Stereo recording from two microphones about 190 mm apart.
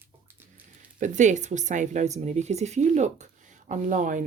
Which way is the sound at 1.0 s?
40° right (ahead or behind).